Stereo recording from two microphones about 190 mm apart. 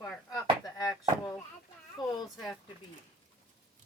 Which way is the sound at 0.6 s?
20° left (ahead or behind).